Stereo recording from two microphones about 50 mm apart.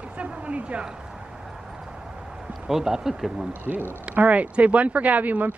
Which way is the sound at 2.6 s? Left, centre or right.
Centre.